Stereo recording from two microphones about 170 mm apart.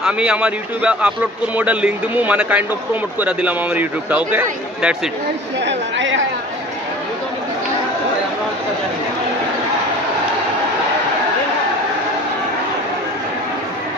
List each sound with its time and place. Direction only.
0.0 s a man's voice: 5° right (ahead or behind)
5.7 s a woman's voice: 90° right